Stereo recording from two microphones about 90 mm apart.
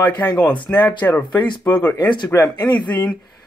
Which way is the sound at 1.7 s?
15° left (ahead or behind).